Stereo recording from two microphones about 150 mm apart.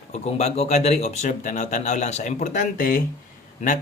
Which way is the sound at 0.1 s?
45° left (ahead or behind).